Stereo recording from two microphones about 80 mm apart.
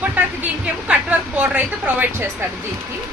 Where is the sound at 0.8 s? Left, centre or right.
Centre.